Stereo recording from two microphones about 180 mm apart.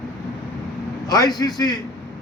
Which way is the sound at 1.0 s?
20° left (ahead or behind).